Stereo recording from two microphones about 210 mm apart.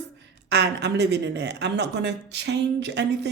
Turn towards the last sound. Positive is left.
turn(degrees=-55)  # may be behind; listen again after turning